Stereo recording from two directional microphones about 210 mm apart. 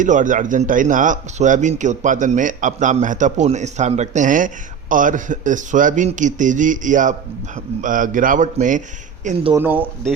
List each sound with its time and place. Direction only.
0.0 s speech: 35° right (ahead or behind)
9.2 s speech: 25° right (ahead or behind)
9.6 s speech: 10° right (ahead or behind)